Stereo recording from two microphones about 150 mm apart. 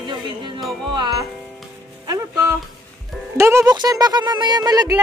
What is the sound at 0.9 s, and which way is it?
Speech, 30° right (ahead or behind).